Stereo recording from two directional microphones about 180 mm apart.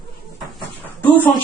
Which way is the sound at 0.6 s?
10° left (ahead or behind).